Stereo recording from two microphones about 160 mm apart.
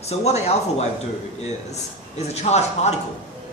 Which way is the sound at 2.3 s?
45° left (ahead or behind).